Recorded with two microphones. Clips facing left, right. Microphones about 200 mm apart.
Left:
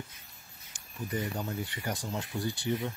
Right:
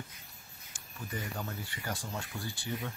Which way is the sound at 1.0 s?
20° left (ahead or behind).